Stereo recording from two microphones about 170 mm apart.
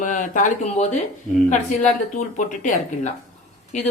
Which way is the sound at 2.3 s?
50° left (ahead or behind).